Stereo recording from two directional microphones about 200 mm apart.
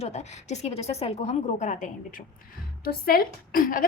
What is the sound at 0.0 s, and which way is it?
A woman's voice, 35° left (ahead or behind).